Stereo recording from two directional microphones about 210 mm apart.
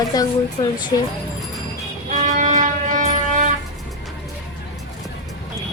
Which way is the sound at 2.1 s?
35° right (ahead or behind).